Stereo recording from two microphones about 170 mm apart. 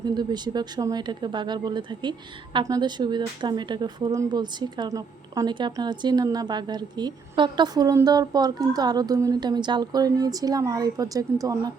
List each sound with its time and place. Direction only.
0.0 s speech: 25° right (ahead or behind)